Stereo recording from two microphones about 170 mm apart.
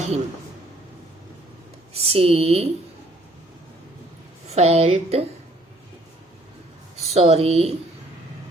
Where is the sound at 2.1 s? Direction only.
35° right (ahead or behind).